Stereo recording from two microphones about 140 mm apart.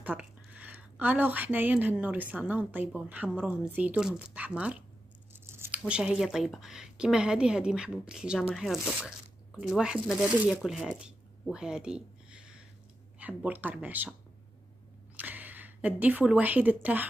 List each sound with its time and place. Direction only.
0.0 s speech: 10° right (ahead or behind)
5.5 s scissors: 15° right (ahead or behind)
5.9 s a woman's voice: 5° right (ahead or behind)
15.1 s speech: 10° right (ahead or behind)